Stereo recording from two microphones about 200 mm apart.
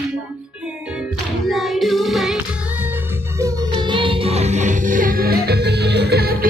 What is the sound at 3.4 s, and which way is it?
Music, 25° right (ahead or behind).